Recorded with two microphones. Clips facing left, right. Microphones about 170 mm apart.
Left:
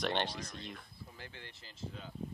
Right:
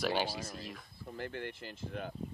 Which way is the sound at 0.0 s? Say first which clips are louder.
Right 2 dB; 5° right (ahead or behind).